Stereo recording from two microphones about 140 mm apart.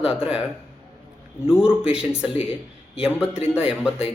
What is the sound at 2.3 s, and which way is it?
Speech, 40° left (ahead or behind).